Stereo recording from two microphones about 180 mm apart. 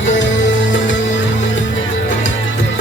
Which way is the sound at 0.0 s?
90° left.